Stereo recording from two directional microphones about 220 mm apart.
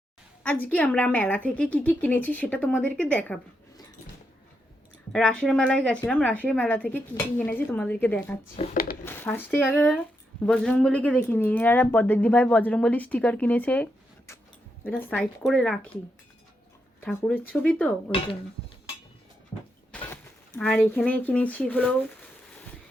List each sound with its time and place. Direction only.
0.4 s speech: 5° left (ahead or behind)
5.1 s speech: 5° left (ahead or behind)
8.5 s speech: 40° left (ahead or behind)
9.0 s speech: 10° left (ahead or behind)
14.8 s speech: 10° left (ahead or behind)
17.0 s speech: 5° left (ahead or behind)
19.9 s a sound: 5° left (ahead or behind)
20.6 s speech: 5° left (ahead or behind)